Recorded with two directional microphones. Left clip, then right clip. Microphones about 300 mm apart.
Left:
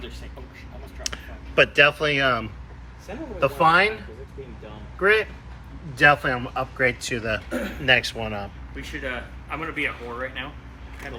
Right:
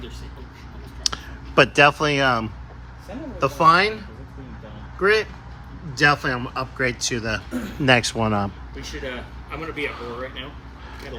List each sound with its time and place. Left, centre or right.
1.0 s a man's voice: centre
4.9 s a man's voice: centre
7.9 s a man's voice: centre
8.7 s speech: centre